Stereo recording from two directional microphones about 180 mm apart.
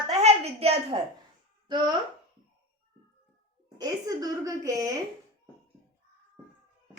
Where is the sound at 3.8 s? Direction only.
20° right (ahead or behind).